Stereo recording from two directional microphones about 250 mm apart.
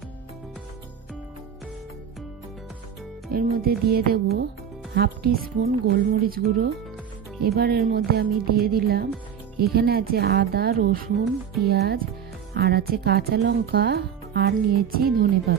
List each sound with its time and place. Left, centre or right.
3.3 s speech: right